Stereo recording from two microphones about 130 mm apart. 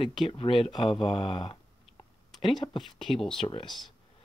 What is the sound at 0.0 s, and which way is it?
Speech, 35° left (ahead or behind).